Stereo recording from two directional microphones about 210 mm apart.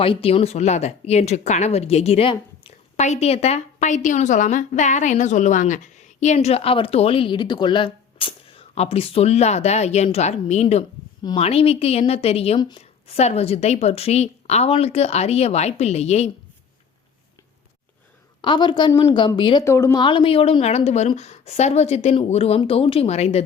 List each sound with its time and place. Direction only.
0.0 s speech: 25° left (ahead or behind)
18.4 s a woman's voice: 20° left (ahead or behind)